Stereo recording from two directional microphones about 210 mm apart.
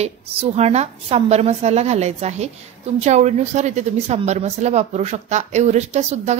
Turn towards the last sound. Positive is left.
turn(degrees=-30)  # may be behind; listen again after turning